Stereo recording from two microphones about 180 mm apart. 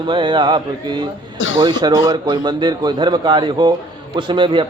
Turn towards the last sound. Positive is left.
turn(degrees=-25)  # may be behind; listen again after turning